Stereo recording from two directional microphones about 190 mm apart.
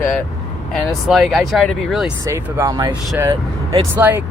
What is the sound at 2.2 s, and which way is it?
Speech, 15° right (ahead or behind).